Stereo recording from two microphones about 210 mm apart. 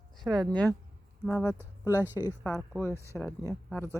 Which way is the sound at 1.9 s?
10° right (ahead or behind).